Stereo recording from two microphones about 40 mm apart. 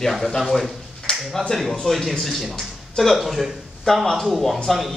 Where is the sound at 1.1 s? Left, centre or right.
Left.